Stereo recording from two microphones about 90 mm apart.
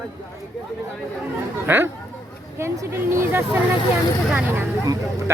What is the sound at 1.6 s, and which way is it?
Speech, 25° right (ahead or behind).